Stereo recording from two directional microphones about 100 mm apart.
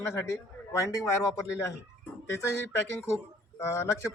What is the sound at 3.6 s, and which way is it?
Speech, 30° left (ahead or behind).